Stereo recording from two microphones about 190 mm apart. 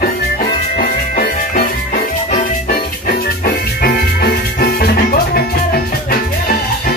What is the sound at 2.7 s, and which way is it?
Music, 55° left (ahead or behind).